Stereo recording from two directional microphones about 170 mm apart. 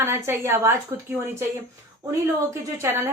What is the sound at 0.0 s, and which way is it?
Speech, 15° right (ahead or behind).